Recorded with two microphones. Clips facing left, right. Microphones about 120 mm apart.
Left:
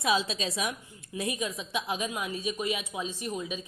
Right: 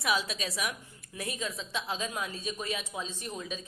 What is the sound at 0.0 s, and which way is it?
A woman's voice, 25° left (ahead or behind).